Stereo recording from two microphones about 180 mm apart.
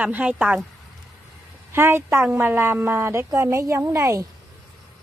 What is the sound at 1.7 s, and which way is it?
A woman's voice, 15° right (ahead or behind).